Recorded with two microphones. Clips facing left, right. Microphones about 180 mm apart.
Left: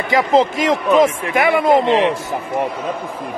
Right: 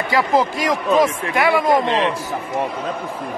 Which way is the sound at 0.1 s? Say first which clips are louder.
Left 4 dB; 25° left (ahead or behind).